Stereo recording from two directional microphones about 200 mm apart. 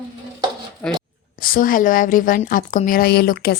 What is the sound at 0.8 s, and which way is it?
Speech, 5° left (ahead or behind).